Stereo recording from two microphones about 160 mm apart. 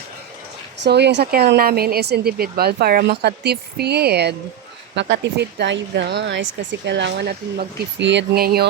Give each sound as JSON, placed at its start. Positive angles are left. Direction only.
{"t": 0.9, "sound": "speech", "side_deg": -90}